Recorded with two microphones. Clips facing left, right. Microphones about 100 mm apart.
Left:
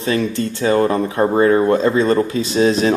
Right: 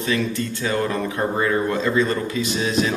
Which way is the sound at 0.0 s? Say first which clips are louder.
Left 4 dB; 35° left (ahead or behind).